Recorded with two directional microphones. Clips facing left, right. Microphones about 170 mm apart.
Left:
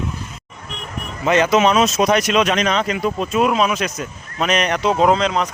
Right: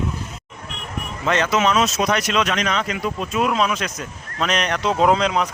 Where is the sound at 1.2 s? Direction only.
10° left (ahead or behind).